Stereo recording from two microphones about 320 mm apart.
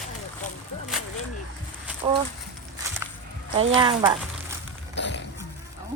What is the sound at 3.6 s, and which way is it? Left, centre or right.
Speech, centre.